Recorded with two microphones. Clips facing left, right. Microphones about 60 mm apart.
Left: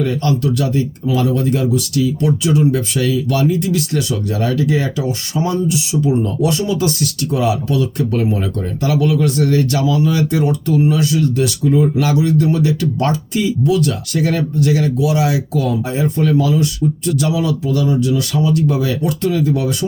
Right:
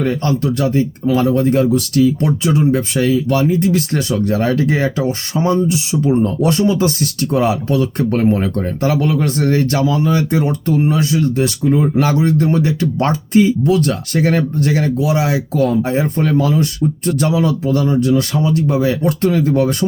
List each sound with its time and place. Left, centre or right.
0.0 s speech: right